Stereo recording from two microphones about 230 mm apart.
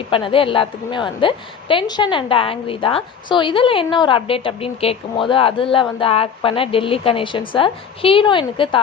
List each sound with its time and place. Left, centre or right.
0.1 s a woman's voice: left